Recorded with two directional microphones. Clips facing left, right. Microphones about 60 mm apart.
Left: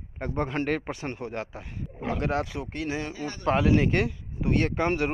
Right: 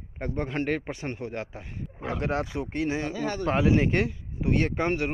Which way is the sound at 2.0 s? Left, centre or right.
Right.